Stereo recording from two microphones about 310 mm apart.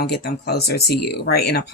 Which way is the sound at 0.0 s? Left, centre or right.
Left.